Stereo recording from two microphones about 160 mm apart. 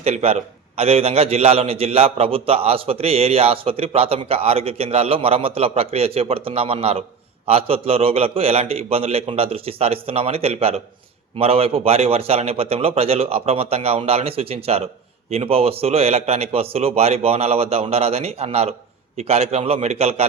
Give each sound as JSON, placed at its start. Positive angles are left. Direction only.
{"t": 0.0, "sound": "a man's voice", "side_deg": -40}